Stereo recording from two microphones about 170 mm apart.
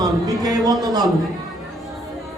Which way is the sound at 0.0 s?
25° right (ahead or behind).